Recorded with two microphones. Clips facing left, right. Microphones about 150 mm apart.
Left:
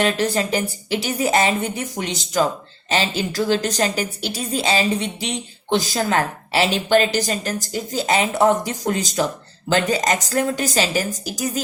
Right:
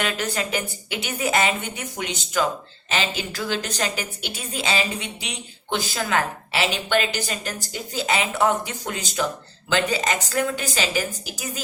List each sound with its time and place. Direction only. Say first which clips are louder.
0.0 s a woman's voice: left 6 dB; 35° left (ahead or behind)